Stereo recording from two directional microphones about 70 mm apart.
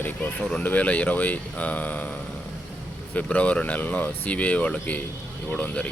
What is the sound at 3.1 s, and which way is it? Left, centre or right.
Speech, left.